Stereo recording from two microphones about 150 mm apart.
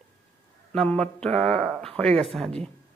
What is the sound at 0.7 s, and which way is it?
Speech, 5° left (ahead or behind).